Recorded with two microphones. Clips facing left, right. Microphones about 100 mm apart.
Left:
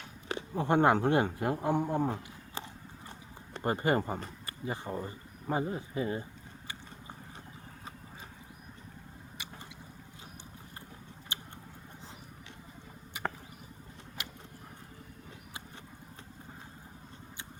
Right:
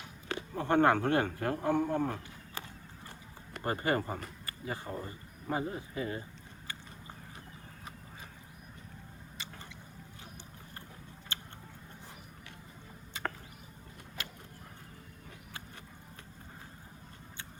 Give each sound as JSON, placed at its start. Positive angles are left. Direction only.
{"t": 0.3, "sound": "a man's voice", "side_deg": 20}
{"t": 3.1, "sound": "a sound", "side_deg": 20}
{"t": 5.5, "sound": "speech", "side_deg": 25}
{"t": 11.3, "sound": "tick", "side_deg": 15}
{"t": 14.2, "sound": "vehicle", "side_deg": 15}